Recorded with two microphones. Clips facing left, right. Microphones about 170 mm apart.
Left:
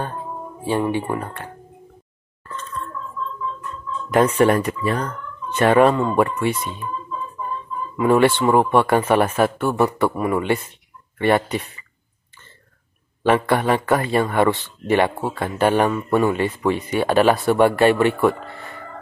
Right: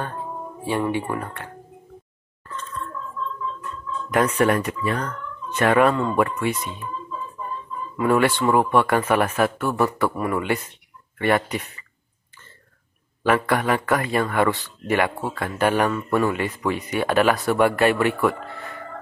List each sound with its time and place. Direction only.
0.9 s speech: 25° left (ahead or behind)
4.1 s speech: 30° left (ahead or behind)
8.0 s speech: 25° left (ahead or behind)
13.2 s speech: 30° left (ahead or behind)